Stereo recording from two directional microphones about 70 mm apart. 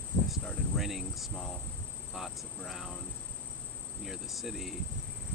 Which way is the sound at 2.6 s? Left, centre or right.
Centre.